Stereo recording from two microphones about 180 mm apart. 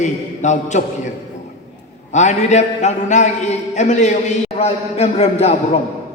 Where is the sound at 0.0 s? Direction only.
40° left (ahead or behind).